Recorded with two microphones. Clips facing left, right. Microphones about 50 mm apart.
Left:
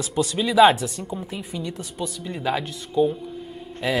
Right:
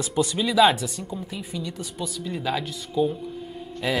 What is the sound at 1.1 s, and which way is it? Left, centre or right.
A woman's voice, left.